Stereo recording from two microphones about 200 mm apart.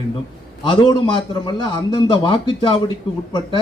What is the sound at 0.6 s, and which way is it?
A man's voice, 25° left (ahead or behind).